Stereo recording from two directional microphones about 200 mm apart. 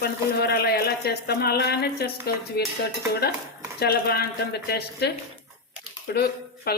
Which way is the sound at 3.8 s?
50° left (ahead or behind).